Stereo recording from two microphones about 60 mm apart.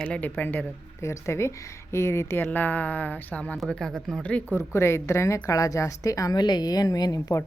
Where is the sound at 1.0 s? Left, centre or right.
Left.